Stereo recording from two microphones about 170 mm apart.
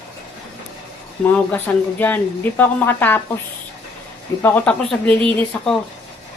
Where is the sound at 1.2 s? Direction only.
10° left (ahead or behind).